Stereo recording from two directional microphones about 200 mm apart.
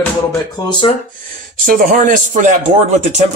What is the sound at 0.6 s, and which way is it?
Speech, 25° left (ahead or behind).